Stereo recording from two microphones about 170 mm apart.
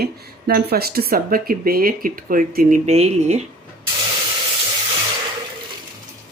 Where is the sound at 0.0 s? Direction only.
65° right (ahead or behind); by 3.4 s 40° right (ahead or behind).